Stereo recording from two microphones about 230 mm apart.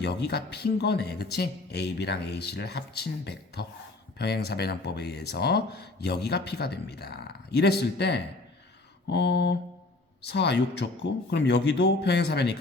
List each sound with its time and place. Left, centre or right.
0.0 s speech: left